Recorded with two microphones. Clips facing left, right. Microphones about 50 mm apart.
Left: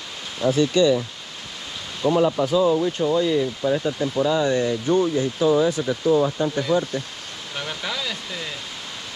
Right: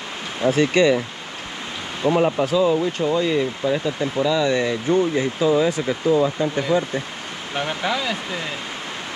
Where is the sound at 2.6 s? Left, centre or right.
Right.